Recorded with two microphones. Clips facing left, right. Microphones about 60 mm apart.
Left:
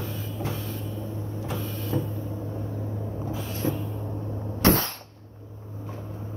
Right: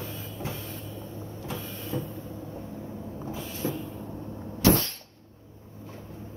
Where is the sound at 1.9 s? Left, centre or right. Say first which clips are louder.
Left 4 dB; left.